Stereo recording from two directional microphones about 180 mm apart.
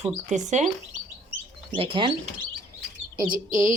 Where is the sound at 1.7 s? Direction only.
30° right (ahead or behind).